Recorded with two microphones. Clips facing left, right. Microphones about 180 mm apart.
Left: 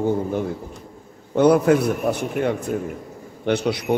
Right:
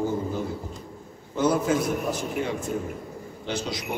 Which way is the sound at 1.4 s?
65° left (ahead or behind).